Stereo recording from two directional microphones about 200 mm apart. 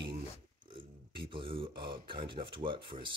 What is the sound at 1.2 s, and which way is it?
Speech, 25° right (ahead or behind).